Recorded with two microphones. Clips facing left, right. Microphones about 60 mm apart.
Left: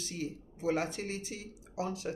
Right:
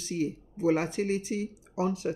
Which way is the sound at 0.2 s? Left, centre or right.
Right.